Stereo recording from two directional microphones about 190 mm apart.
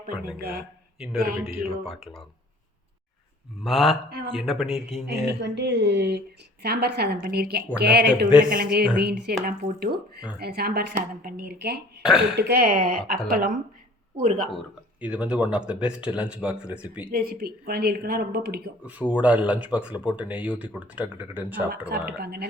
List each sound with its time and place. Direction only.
0.1 s speech: 50° right (ahead or behind)
0.9 s a man's voice: 5° right (ahead or behind)
1.2 s speech: 55° right (ahead or behind)
3.6 s speech: centre (ahead or behind)
5.0 s a woman's voice: 60° right (ahead or behind)
15.0 s speech: 5° right (ahead or behind)
17.1 s speech: 50° right (ahead or behind)
18.9 s speech: 10° right (ahead or behind)
21.7 s a woman's voice: 55° right (ahead or behind)